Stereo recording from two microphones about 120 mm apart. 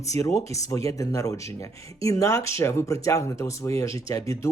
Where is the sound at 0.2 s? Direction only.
25° left (ahead or behind).